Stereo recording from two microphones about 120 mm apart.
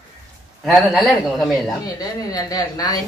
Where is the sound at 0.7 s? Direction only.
Centre (ahead or behind).